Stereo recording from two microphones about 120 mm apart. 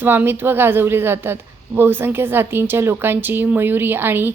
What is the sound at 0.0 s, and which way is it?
A woman's voice, 15° right (ahead or behind).